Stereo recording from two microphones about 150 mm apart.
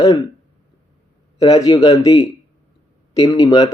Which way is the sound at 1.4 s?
25° left (ahead or behind).